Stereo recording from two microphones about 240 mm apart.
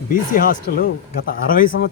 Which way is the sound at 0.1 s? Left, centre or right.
Left.